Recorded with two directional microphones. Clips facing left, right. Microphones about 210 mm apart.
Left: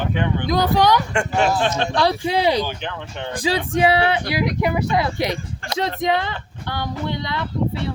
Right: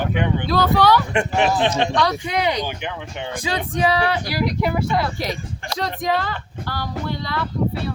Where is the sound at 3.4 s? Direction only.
30° left (ahead or behind).